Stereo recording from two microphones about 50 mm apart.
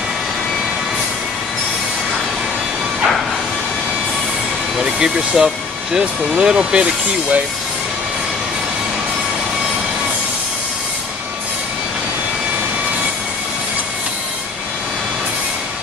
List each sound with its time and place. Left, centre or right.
4.7 s speech: centre